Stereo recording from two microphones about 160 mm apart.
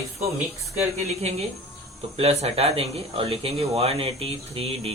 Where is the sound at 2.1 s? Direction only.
40° right (ahead or behind).